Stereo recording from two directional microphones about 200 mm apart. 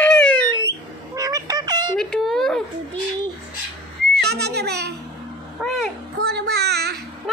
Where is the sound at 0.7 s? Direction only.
15° right (ahead or behind).